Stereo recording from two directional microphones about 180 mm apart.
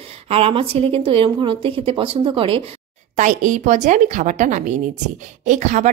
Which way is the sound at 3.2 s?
45° right (ahead or behind).